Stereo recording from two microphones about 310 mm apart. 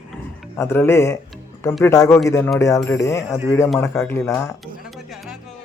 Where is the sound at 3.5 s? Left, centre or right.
Centre.